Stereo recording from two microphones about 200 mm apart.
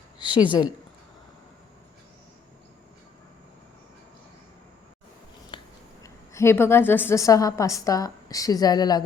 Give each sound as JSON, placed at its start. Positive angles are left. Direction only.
{"t": 0.3, "sound": "speech", "side_deg": -5}
{"t": 5.5, "sound": "scissors", "side_deg": 25}
{"t": 6.0, "sound": "a woman's voice", "side_deg": 15}